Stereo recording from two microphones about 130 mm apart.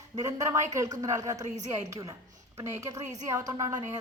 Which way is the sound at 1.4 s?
65° right (ahead or behind).